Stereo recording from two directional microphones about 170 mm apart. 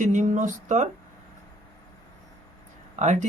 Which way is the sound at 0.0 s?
50° right (ahead or behind).